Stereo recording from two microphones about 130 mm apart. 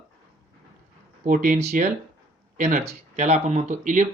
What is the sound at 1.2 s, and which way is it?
Speech, 90° right.